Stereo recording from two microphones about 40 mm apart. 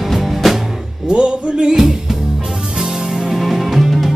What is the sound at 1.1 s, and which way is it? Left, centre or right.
Music, right.